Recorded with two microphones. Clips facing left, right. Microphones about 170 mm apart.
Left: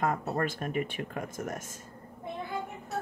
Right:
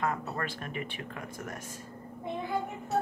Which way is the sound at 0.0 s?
45° left (ahead or behind).